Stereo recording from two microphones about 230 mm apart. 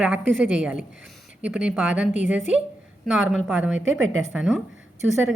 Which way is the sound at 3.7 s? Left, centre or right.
Right.